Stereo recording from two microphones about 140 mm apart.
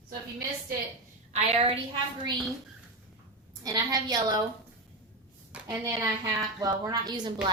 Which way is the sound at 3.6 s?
25° right (ahead or behind).